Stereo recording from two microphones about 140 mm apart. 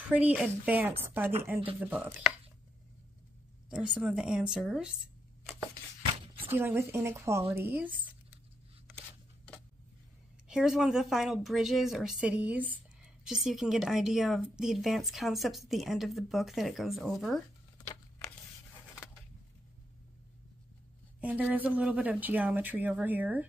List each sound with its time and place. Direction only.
0.0 s speech: 10° right (ahead or behind)
3.7 s a woman's voice: 5° right (ahead or behind)
6.1 s a sound: 40° right (ahead or behind)
6.5 s speech: 15° right (ahead or behind)
10.5 s a woman's voice: 5° right (ahead or behind)
21.2 s speech: 10° right (ahead or behind)